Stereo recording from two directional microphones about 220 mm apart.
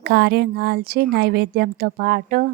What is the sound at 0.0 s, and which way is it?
A woman's voice, 45° right (ahead or behind).